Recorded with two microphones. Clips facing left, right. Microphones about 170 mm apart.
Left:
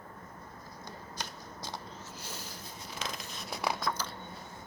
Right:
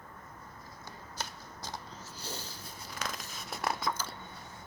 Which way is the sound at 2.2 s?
30° right (ahead or behind).